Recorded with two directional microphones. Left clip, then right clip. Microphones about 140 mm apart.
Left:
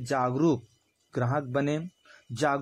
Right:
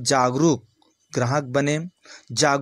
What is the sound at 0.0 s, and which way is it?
Speech, 20° right (ahead or behind).